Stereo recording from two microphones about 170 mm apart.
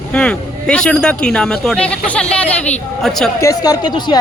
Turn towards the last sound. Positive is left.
turn(degrees=25)  # may be behind; listen again after turning